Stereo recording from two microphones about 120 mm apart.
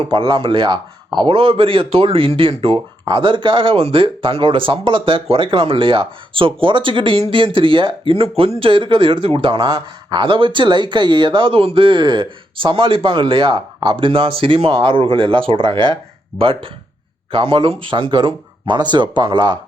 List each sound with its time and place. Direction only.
0.0 s speech: 45° right (ahead or behind)